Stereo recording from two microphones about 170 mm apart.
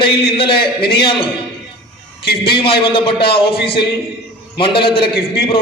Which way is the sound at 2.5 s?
30° left (ahead or behind).